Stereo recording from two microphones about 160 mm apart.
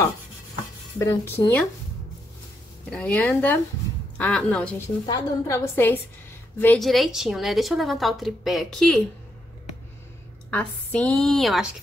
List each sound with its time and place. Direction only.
0.9 s a woman's voice: 15° left (ahead or behind)
2.9 s a woman's voice: 10° left (ahead or behind)
5.0 s a woman's voice: 20° left (ahead or behind)
6.8 s a woman's voice: centre (ahead or behind)
10.5 s a woman's voice: 5° left (ahead or behind)